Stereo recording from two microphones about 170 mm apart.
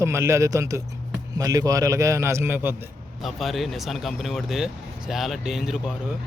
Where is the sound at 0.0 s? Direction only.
15° right (ahead or behind).